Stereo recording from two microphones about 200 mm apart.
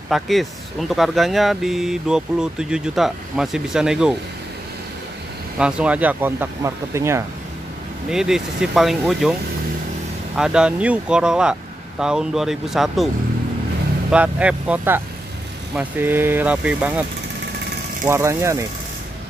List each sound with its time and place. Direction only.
0.1 s speech: centre (ahead or behind)
5.6 s speech: 5° right (ahead or behind)
8.1 s speech: 5° right (ahead or behind)
10.3 s speech: 5° right (ahead or behind)
14.1 s speech: 5° right (ahead or behind)
18.0 s speech: 15° right (ahead or behind)